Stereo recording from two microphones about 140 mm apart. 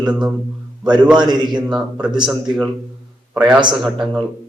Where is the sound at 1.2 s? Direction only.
30° right (ahead or behind).